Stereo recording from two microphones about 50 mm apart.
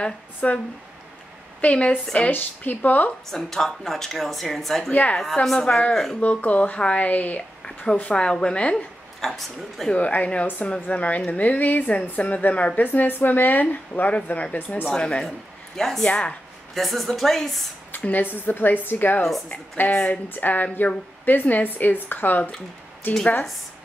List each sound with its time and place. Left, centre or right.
0.4 s a woman's voice: left
1.6 s a woman's voice: left
3.3 s speech: centre
6.2 s a woman's voice: left
8.1 s a woman's voice: centre
9.2 s speech: centre
9.9 s a woman's voice: left
15.2 s speech: centre
16.1 s a woman's voice: left
16.7 s speech: centre
18.0 s a woman's voice: left